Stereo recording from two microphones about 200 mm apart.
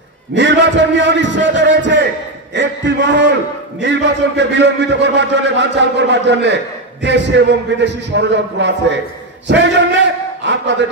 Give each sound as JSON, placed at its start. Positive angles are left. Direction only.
{"t": 0.3, "sound": "a man's voice", "side_deg": -65}